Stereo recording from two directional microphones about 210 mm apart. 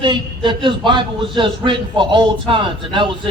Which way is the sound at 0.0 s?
25° right (ahead or behind).